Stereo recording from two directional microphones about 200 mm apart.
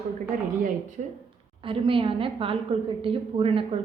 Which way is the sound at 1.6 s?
25° right (ahead or behind).